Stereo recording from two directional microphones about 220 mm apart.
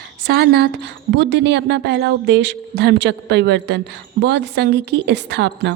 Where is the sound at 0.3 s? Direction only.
45° right (ahead or behind).